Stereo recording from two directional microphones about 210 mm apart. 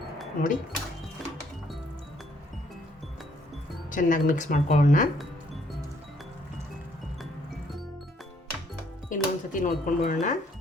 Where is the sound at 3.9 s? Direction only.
40° left (ahead or behind).